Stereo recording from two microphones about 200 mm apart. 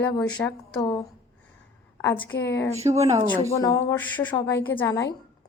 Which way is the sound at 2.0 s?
10° left (ahead or behind).